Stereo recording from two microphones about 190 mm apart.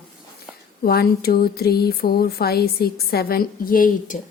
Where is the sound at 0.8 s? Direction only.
55° left (ahead or behind).